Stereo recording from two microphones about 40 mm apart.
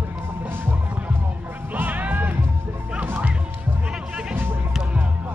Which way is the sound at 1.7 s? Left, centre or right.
Right.